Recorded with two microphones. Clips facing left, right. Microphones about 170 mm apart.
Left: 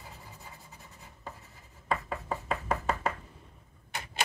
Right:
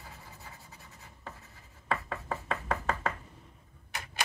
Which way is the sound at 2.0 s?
15° left (ahead or behind).